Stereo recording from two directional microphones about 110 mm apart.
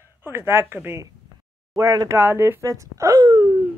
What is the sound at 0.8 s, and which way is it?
Speech, 25° right (ahead or behind).